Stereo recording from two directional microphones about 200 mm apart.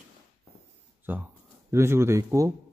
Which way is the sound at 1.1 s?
10° right (ahead or behind).